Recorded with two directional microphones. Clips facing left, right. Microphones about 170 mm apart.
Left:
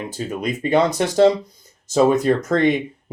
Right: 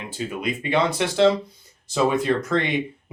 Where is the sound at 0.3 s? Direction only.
40° left (ahead or behind).